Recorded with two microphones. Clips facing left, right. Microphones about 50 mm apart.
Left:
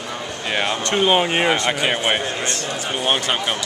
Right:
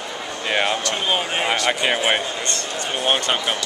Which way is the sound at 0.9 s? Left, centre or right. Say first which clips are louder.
Left 5 dB; left.